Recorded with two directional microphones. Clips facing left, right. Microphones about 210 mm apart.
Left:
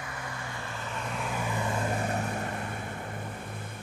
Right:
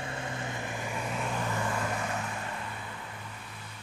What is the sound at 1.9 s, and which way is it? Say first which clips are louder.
Vehicle: left 4 dB; 40° left (ahead or behind).